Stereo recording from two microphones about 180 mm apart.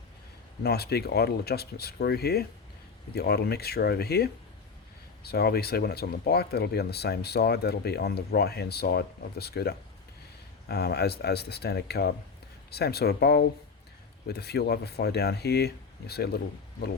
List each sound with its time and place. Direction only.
0.6 s speech: 60° left (ahead or behind)